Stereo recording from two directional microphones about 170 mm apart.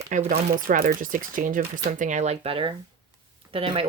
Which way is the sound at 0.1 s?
50° right (ahead or behind).